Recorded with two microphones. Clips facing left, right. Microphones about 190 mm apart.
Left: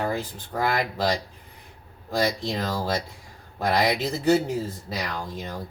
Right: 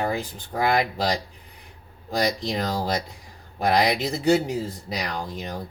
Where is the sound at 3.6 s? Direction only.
15° right (ahead or behind).